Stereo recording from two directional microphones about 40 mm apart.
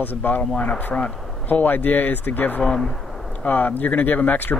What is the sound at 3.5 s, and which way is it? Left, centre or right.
Speech, left.